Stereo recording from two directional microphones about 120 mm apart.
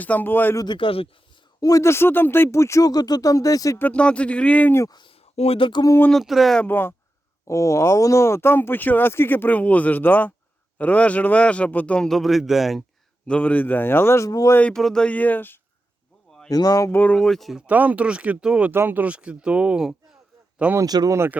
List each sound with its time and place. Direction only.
0.0 s speech: 15° left (ahead or behind)
0.5 s speech: 35° left (ahead or behind)
1.6 s speech: 25° left (ahead or behind)
3.8 s speech: 10° left (ahead or behind)
4.8 s speech: 35° left (ahead or behind)
5.4 s a sound: 50° left (ahead or behind)
6.1 s speech: centre (ahead or behind)
6.7 s speech: 15° left (ahead or behind); by 12.8 s centre (ahead or behind)
13.2 s speech: 10° left (ahead or behind); by 14.5 s 30° left (ahead or behind)
14.5 s speech: 10° left (ahead or behind)
16.5 s speech: 30° left (ahead or behind)
17.0 s speech: 10° left (ahead or behind)
17.7 s speech: 15° right (ahead or behind)
20.7 s speech: 30° right (ahead or behind)